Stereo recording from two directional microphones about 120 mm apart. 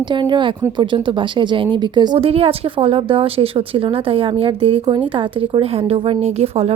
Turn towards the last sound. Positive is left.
turn(degrees=-55)  # may be behind; listen again after turning